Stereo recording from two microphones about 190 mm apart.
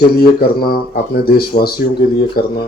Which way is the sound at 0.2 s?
55° left (ahead or behind).